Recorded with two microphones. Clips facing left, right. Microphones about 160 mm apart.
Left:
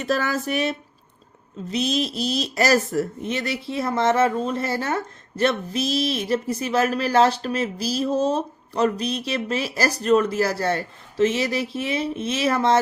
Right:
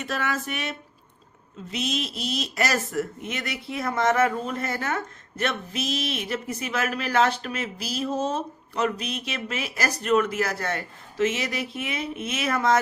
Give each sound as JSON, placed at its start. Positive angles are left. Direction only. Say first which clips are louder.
{"t": 0.0, "sound": "speech", "louder": "left 5 dB", "side_deg": 35}